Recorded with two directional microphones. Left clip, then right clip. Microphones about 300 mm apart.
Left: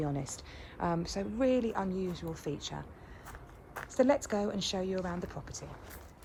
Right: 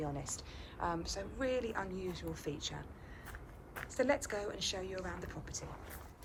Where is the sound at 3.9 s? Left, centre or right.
Left.